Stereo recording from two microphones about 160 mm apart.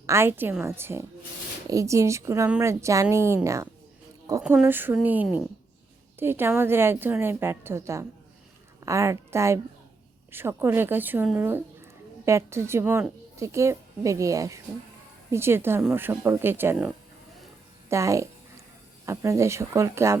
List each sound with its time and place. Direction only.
0.1 s a woman's voice: 15° right (ahead or behind)
17.8 s a sound: 20° right (ahead or behind)
19.0 s a woman's voice: 20° right (ahead or behind)